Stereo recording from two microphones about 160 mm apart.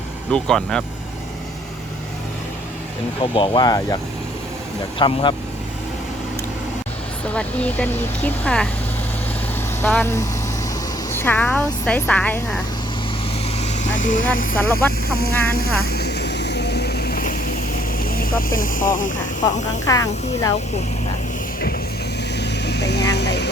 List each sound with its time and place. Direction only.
0.3 s speech: 5° left (ahead or behind)
3.3 s speech: 30° left (ahead or behind)
4.9 s speech: 30° left (ahead or behind)
7.3 s speech: 10° left (ahead or behind)
10.0 s speech: 15° left (ahead or behind)
13.6 s vehicle: 50° left (ahead or behind)
14.3 s speech: 60° left (ahead or behind)
15.1 s speech: 75° left (ahead or behind)
15.4 s vehicle: 70° left (ahead or behind)
18.0 s speech: 65° left (ahead or behind); by 19.6 s 50° left (ahead or behind)
19.8 s speech: 20° left (ahead or behind)
22.4 s vehicle: 90° left